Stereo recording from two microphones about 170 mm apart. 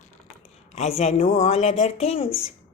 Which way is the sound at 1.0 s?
40° left (ahead or behind).